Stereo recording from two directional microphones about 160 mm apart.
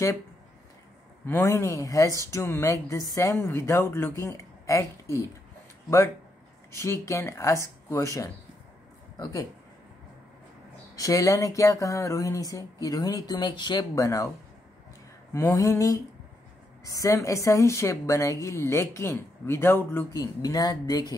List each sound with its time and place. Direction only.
1.2 s a woman's voice: 20° left (ahead or behind)
6.8 s a woman's voice: 15° left (ahead or behind)
11.0 s a woman's voice: 20° left (ahead or behind)
15.3 s a woman's voice: 20° left (ahead or behind)